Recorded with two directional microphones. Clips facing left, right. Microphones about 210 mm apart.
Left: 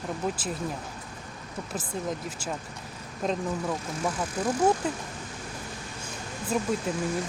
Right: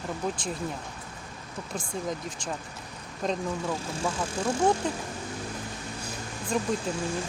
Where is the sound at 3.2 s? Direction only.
Centre (ahead or behind).